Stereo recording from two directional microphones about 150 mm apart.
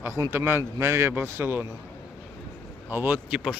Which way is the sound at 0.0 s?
15° right (ahead or behind).